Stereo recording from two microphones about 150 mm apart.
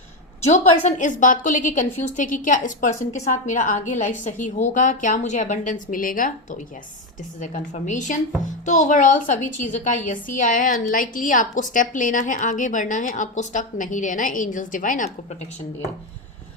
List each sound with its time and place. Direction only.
0.4 s a woman's voice: 50° left (ahead or behind)